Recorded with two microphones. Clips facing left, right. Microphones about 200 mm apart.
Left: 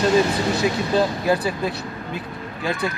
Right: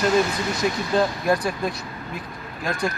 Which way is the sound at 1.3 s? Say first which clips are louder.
Left 1 dB; 5° left (ahead or behind).